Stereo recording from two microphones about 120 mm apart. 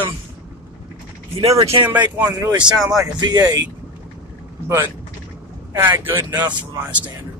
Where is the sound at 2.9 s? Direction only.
35° right (ahead or behind).